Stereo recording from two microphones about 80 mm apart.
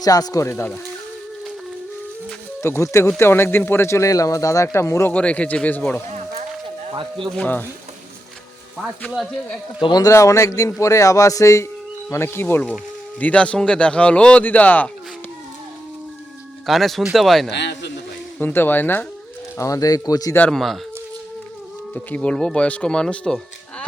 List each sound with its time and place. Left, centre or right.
0.0 s speech: left
0.4 s speech: left
2.6 s speech: left
5.1 s speech: centre
10.0 s speech: left
13.1 s speech: centre
16.6 s speech: centre
18.3 s speech: left
19.5 s speech: left
20.5 s speech: centre
21.9 s speech: centre